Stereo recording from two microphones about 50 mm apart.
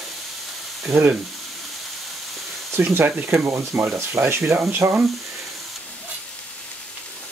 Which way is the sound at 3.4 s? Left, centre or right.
Right.